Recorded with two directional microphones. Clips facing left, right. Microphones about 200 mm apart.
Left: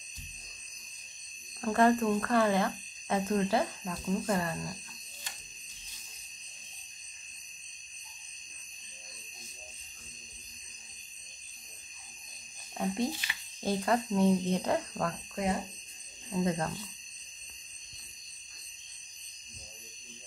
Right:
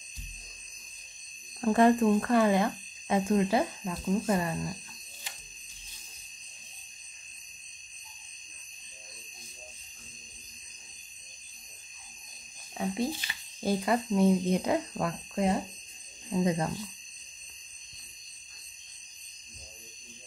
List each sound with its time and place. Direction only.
1.6 s speech: 15° right (ahead or behind)
12.7 s speech: centre (ahead or behind)
16.3 s speech: 15° right (ahead or behind)